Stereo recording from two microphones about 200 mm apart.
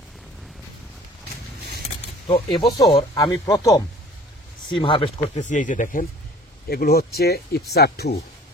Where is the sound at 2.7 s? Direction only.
25° left (ahead or behind).